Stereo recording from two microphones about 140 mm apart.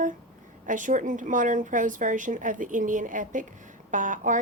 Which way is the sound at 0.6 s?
65° right (ahead or behind).